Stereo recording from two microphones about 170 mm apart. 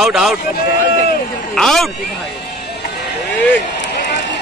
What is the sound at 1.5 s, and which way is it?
Speech, centre (ahead or behind).